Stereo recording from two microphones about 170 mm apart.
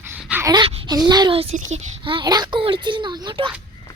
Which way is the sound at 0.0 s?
10° right (ahead or behind).